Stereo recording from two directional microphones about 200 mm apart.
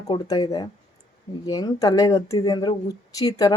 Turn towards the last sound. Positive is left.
turn(degrees=15)  # may be behind; listen again after turning